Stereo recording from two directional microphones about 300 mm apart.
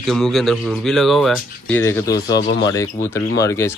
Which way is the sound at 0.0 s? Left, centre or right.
Centre.